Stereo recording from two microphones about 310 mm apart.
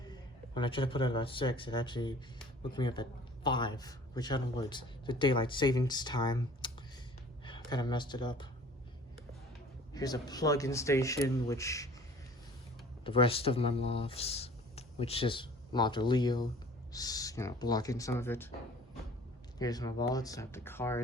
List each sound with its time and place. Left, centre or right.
0.0 s a man's voice: centre
7.7 s a man's voice: centre
9.9 s a man's voice: centre
13.1 s a man's voice: centre
19.5 s a man's voice: centre